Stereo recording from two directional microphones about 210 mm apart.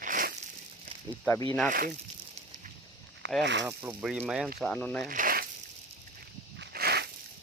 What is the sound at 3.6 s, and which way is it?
Speech, 10° right (ahead or behind).